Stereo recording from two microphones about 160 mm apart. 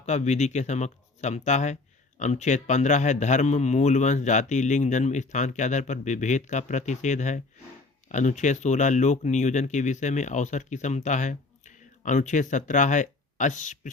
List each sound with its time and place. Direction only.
0.0 s speech: 45° left (ahead or behind)